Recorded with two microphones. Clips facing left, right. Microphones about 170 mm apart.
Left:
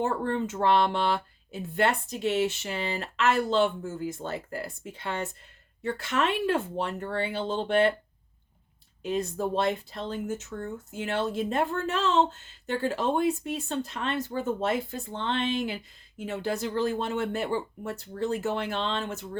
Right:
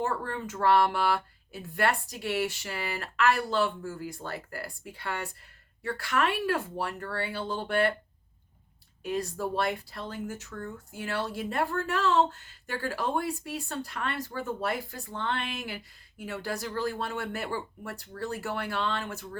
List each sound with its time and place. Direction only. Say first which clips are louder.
0.0 s speech: left 4 dB; 25° left (ahead or behind)
9.0 s speech: left 3 dB; 20° left (ahead or behind)